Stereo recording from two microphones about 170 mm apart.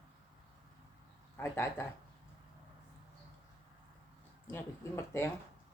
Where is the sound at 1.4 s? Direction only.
15° left (ahead or behind).